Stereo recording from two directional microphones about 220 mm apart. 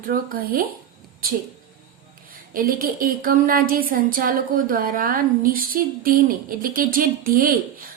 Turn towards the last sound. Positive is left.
turn(degrees=-40)  # may be behind; listen again after turning